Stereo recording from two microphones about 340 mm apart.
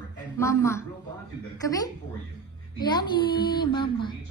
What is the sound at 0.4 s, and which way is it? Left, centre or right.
Speech, centre.